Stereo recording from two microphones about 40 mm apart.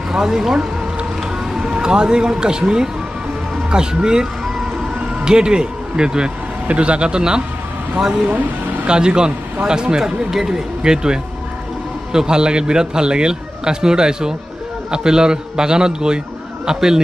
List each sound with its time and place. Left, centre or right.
0.1 s a man's voice: centre
8.8 s a man's voice: right